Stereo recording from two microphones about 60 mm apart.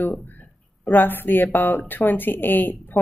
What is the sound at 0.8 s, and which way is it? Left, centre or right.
A woman's voice, left.